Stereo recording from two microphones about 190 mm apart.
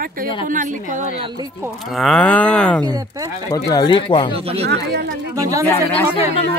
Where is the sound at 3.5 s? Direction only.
20° left (ahead or behind).